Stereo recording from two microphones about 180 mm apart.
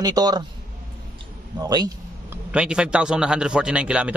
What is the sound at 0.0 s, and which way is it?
Speech, 20° right (ahead or behind).